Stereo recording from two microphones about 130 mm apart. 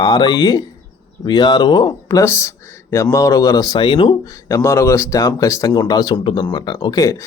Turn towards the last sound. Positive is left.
turn(degrees=25)  # may be behind; listen again after turning